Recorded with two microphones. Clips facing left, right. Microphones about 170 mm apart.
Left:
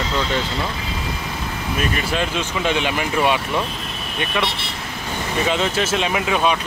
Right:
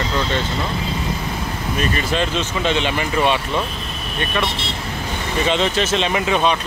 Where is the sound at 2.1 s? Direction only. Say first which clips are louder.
Right 2 dB; 10° left (ahead or behind).